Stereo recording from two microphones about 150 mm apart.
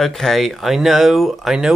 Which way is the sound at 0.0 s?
Centre (ahead or behind).